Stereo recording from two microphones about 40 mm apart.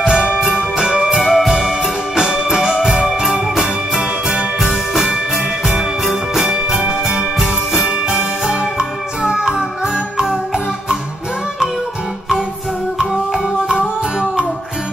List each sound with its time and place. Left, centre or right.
0.0 s music: right
1.1 s music: centre
1.5 s music: centre
8.5 s music: centre
13.0 s music: centre